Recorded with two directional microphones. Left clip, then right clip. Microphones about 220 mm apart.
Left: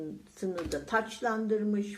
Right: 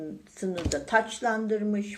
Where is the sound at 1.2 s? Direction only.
Centre (ahead or behind).